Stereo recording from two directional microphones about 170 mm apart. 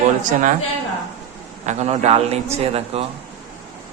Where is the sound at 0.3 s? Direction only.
50° right (ahead or behind).